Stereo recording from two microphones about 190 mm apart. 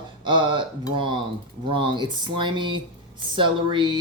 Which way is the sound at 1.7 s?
25° right (ahead or behind).